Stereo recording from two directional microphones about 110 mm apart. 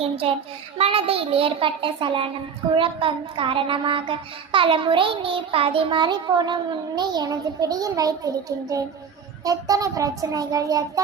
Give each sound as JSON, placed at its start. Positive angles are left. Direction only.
{"t": 0.8, "sound": "a child's voice", "side_deg": -60}